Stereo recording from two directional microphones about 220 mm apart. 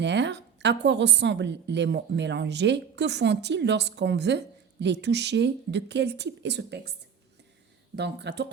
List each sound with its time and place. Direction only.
0.0 s a woman's voice: 55° right (ahead or behind)
7.9 s a woman's voice: 50° right (ahead or behind)